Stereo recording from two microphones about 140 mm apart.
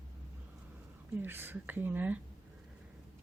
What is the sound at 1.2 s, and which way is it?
Speech, 15° right (ahead or behind).